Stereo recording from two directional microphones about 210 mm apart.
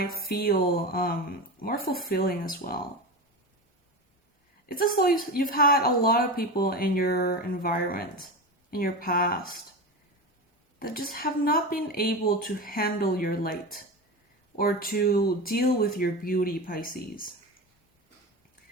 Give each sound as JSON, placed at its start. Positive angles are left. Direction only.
{"t": 0.0, "sound": "speech", "side_deg": 45}
{"t": 4.7, "sound": "speech", "side_deg": 45}
{"t": 10.8, "sound": "speech", "side_deg": 45}